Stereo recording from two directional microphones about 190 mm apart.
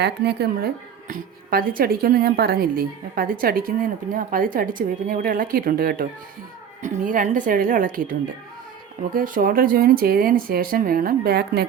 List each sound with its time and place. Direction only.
0.0 s speech: 60° right (ahead or behind)
9.1 s speech: 45° right (ahead or behind)